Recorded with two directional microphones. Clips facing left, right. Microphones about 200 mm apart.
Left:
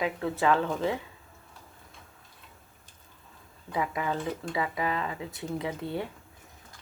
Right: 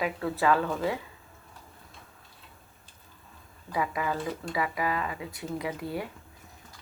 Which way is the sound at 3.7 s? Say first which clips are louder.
Even; 25° left (ahead or behind).